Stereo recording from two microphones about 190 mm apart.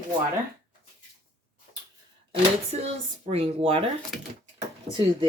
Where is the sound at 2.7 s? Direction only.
35° right (ahead or behind).